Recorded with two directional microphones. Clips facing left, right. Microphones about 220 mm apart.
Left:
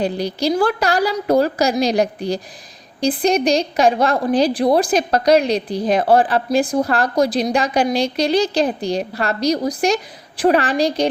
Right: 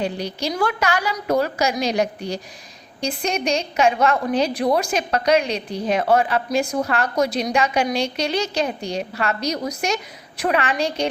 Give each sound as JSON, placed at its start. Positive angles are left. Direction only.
{"t": 0.0, "sound": "a woman's voice", "side_deg": 35}